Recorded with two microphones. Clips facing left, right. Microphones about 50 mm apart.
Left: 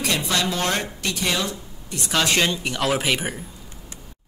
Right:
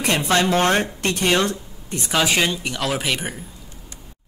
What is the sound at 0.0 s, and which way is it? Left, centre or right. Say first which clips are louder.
Speech: right 4 dB; right.